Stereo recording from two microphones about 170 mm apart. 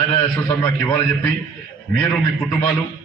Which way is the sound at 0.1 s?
20° left (ahead or behind).